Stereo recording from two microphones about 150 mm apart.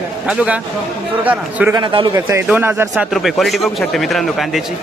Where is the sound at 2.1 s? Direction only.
15° right (ahead or behind).